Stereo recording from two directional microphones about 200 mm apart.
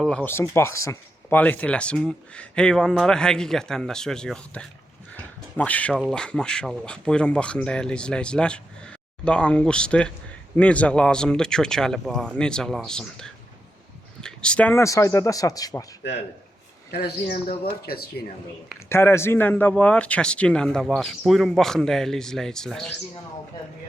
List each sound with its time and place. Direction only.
0.0 s speech: 5° left (ahead or behind)
16.9 s speech: 55° left (ahead or behind)
18.9 s speech: 10° left (ahead or behind)